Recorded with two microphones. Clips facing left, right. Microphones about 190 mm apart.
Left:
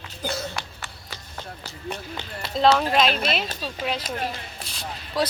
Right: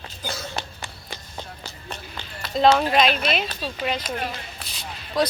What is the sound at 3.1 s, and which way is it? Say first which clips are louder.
Speech: right 1 dB; 40° left (ahead or behind).